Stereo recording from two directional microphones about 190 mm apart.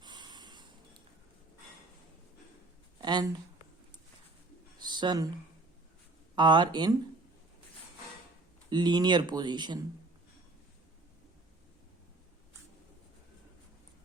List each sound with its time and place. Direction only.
0.0 s snort: 25° right (ahead or behind)
3.0 s speech: 20° right (ahead or behind)
4.8 s a sound: 25° right (ahead or behind)
6.3 s speech: 25° right (ahead or behind)
8.7 s speech: 20° right (ahead or behind)